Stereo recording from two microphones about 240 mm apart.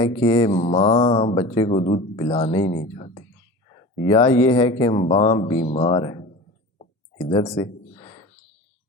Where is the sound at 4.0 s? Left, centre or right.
Centre.